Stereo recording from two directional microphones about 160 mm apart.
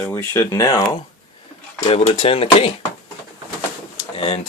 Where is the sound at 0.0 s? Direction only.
10° left (ahead or behind).